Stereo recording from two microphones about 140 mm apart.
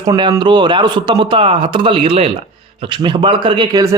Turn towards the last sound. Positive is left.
turn(degrees=-35)  # may be behind; listen again after turning